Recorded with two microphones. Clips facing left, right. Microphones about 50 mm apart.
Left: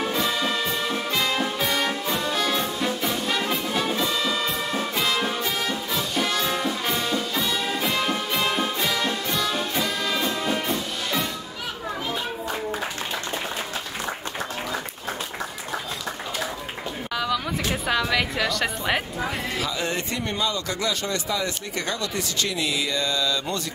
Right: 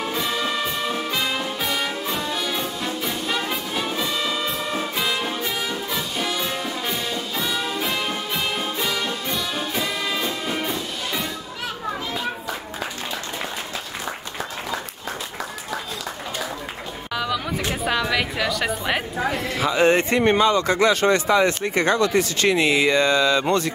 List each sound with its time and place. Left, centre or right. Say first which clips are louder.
0.2 s brass instrument: right 2 dB; centre
1.1 s music: left 1 dB; centre
4.2 s music: even; centre
6.5 s music: left 1 dB; centre
17.1 s a sound: right 1 dB; centre
17.8 s a woman's voice: right 1 dB; centre
19.6 s speech: right 14 dB; right